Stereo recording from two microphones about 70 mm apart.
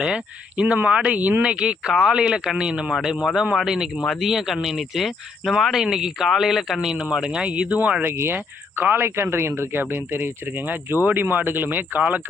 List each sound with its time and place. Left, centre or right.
0.0 s speech: centre
8.0 s speech: right